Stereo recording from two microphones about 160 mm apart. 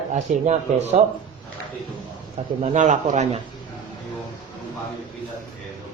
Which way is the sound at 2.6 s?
50° right (ahead or behind).